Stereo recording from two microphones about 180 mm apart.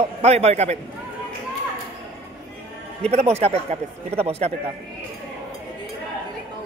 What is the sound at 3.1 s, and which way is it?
Speech, 35° right (ahead or behind).